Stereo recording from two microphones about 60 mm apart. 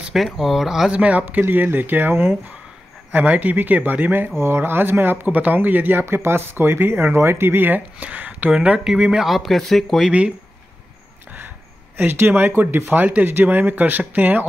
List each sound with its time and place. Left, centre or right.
0.1 s speech: centre
0.9 s speech: right
6.0 s speech: right; by 9.2 s centre
9.2 s speech: centre
12.0 s speech: right